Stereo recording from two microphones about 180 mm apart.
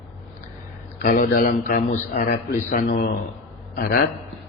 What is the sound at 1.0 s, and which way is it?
A man's voice, 50° left (ahead or behind).